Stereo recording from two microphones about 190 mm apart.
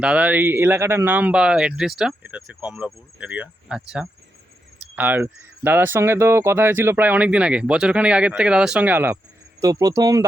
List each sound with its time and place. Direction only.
0.0 s speech: 5° right (ahead or behind)